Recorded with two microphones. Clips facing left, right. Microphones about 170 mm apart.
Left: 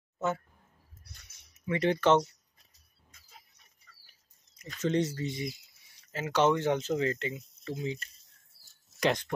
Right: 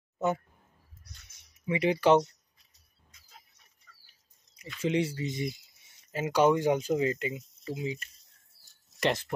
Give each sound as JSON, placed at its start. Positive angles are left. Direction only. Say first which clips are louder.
{"t": 1.1, "sound": "speech", "louder": "right 1 dB", "side_deg": 30}
{"t": 1.5, "sound": "speech", "louder": "right 1 dB", "side_deg": -10}
{"t": 4.8, "sound": "speech", "louder": "even", "side_deg": -10}